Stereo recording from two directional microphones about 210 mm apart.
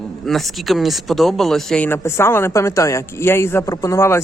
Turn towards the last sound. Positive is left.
turn(degrees=15)  # may be behind; listen again after turning